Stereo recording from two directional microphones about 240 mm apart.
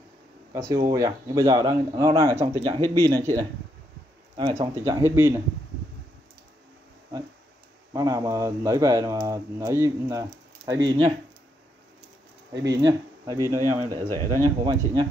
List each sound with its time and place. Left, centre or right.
0.5 s speech: centre
7.9 s speech: centre
12.6 s speech: centre